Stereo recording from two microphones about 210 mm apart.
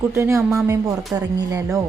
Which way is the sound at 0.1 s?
10° right (ahead or behind).